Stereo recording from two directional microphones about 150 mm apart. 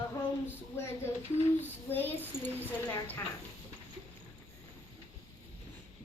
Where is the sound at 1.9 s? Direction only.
15° left (ahead or behind).